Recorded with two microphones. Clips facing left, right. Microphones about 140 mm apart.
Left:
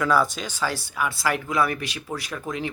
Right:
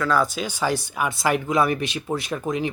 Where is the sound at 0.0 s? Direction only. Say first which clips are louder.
Even; 10° left (ahead or behind).